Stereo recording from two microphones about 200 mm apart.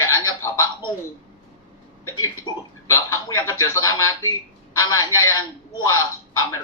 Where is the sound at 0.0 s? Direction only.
15° left (ahead or behind).